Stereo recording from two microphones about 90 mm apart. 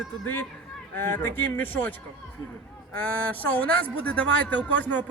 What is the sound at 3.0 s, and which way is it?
A man's voice, 20° left (ahead or behind).